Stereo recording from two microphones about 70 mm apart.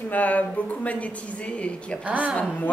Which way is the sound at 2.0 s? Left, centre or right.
Right.